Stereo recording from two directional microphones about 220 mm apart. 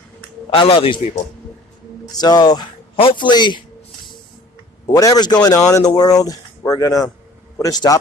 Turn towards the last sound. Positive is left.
turn(degrees=15)  # may be behind; listen again after turning